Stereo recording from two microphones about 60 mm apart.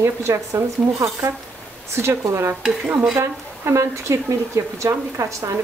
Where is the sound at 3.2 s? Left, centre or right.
Right.